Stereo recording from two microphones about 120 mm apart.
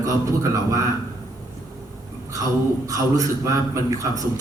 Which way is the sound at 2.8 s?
25° right (ahead or behind).